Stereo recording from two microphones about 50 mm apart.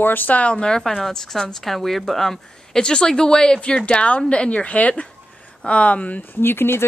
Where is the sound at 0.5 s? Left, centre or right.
Centre.